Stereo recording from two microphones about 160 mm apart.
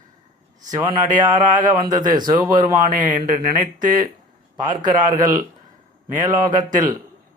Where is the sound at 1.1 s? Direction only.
55° right (ahead or behind).